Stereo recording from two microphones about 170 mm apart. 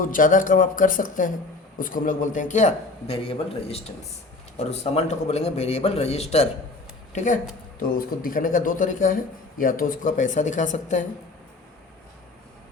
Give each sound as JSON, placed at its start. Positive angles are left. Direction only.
{"t": 0.0, "sound": "a man's voice", "side_deg": 50}
{"t": 7.8, "sound": "a man's voice", "side_deg": 55}